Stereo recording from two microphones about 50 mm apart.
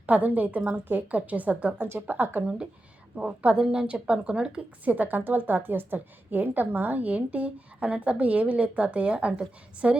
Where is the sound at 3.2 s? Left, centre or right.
Right.